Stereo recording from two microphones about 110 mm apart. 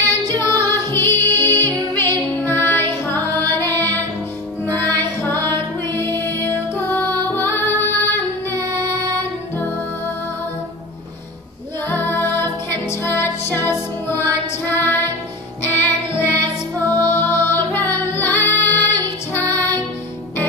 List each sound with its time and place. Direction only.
0.0 s music: 25° left (ahead or behind)
11.9 s music: 25° left (ahead or behind)